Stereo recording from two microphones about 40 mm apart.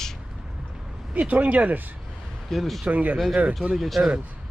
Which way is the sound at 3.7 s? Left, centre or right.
Centre.